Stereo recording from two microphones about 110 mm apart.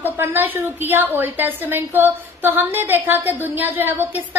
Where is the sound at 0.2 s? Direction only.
20° right (ahead or behind).